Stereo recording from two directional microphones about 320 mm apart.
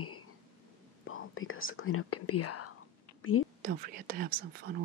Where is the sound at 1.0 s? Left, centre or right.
Left.